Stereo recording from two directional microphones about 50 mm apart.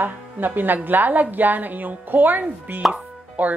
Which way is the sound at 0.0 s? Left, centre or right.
Right.